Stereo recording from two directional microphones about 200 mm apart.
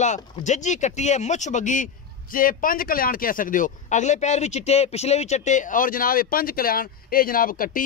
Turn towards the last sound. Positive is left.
turn(degrees=45)  # may be behind; listen again after turning